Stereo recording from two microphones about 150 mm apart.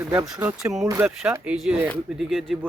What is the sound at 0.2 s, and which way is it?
Speech, 10° right (ahead or behind).